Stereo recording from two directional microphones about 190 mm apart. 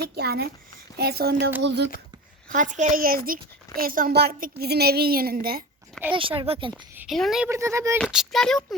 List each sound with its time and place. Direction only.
0.0 s speech: 55° right (ahead or behind)
2.5 s a child's voice: 40° right (ahead or behind)
6.1 s a woman's voice: 25° right (ahead or behind)
6.9 s speech: 10° right (ahead or behind)
7.5 s speech: 15° right (ahead or behind)
7.9 s speech: centre (ahead or behind)